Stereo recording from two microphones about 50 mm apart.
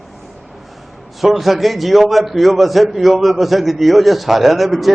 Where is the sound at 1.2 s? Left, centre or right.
Centre.